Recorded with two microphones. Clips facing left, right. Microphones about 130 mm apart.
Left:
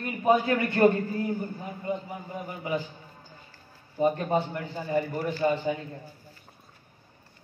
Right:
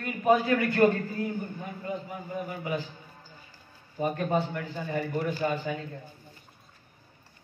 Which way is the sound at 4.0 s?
30° left (ahead or behind).